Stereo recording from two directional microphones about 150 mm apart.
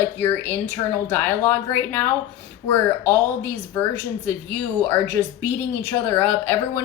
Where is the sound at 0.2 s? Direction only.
15° left (ahead or behind).